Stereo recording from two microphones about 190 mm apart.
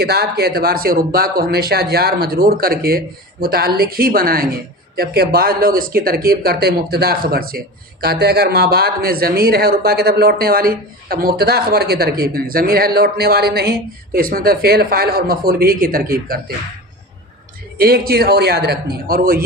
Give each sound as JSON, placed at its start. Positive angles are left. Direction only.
{"t": 0.0, "sound": "speech", "side_deg": -60}
{"t": 17.7, "sound": "speech", "side_deg": -50}